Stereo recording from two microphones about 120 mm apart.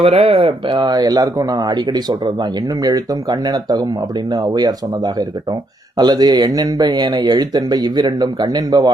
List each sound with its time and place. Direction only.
0.0 s speech: 55° right (ahead or behind); by 8.9 s 35° right (ahead or behind)